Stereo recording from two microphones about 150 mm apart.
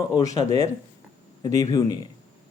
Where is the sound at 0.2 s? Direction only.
20° left (ahead or behind).